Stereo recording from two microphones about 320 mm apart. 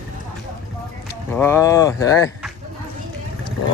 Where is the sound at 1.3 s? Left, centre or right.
Centre.